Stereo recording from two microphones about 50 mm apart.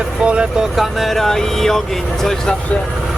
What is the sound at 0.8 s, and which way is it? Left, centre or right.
Speech, centre.